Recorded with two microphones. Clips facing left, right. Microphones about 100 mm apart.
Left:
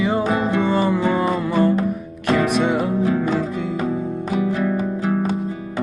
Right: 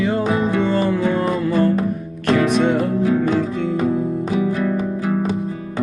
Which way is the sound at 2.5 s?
15° left (ahead or behind).